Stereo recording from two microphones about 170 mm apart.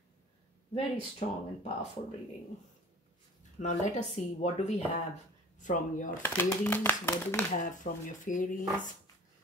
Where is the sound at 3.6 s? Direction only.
45° left (ahead or behind).